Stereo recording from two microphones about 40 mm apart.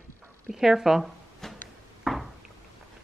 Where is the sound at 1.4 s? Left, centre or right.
Centre.